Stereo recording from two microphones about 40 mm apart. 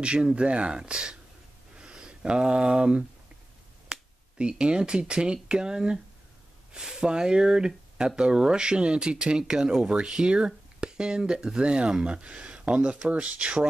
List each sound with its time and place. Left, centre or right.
0.0 s speech: right